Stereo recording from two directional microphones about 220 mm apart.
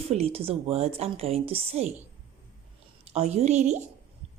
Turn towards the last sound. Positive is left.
turn(degrees=-30)  # may be behind; listen again after turning